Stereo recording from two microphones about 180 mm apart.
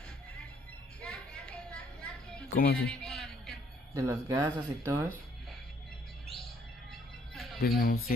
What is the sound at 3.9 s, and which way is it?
Speech, 15° right (ahead or behind).